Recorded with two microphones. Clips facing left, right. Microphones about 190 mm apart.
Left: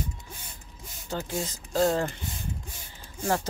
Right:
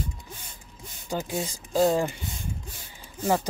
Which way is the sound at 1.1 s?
15° right (ahead or behind).